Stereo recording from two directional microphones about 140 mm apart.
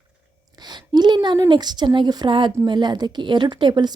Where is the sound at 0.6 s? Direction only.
30° right (ahead or behind).